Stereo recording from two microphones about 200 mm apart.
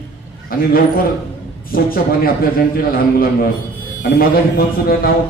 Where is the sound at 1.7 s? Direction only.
45° left (ahead or behind).